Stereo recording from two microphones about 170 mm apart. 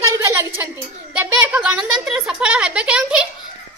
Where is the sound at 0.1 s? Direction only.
15° right (ahead or behind).